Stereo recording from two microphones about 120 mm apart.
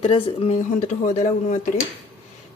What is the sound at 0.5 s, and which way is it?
Speech, 85° left.